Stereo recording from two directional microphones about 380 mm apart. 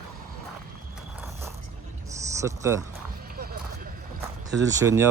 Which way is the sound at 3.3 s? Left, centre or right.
Right.